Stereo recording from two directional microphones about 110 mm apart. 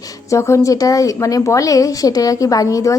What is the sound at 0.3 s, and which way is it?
A woman's voice, 25° left (ahead or behind).